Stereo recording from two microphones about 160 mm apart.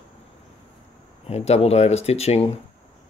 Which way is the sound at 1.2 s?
40° left (ahead or behind).